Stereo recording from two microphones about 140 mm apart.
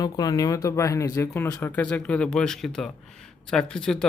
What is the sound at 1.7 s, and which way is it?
Speech, 10° left (ahead or behind).